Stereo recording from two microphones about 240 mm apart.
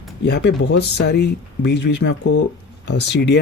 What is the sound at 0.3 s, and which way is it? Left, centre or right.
Speech, left.